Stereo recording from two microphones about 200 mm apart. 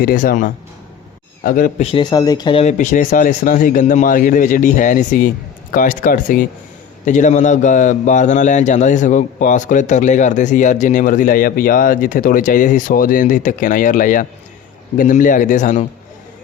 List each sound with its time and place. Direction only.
0.0 s speech: 45° left (ahead or behind)
1.9 s a man's voice: 20° left (ahead or behind)